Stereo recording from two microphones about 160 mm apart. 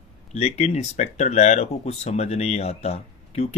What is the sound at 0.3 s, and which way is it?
Speech, 40° left (ahead or behind).